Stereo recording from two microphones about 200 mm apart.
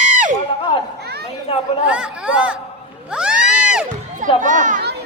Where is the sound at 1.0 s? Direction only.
55° right (ahead or behind).